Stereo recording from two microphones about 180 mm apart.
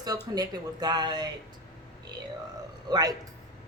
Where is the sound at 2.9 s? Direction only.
20° right (ahead or behind).